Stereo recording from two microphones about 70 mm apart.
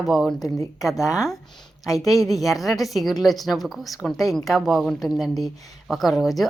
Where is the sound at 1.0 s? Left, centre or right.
Left.